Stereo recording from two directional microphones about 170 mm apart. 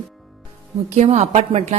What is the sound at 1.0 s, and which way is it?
Speech, 40° right (ahead or behind).